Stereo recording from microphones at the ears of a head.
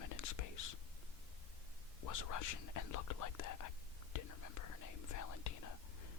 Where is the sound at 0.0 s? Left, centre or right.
Left.